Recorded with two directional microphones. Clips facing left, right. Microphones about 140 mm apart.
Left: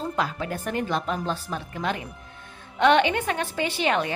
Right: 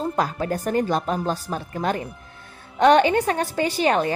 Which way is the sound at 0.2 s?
40° right (ahead or behind).